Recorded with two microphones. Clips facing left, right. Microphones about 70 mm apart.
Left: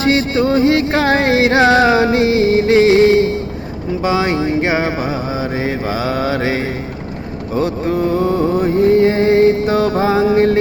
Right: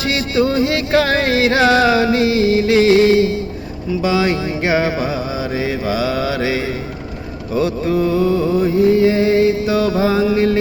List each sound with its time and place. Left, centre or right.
0.0 s music: left
4.0 s a sound: left
5.5 s music: left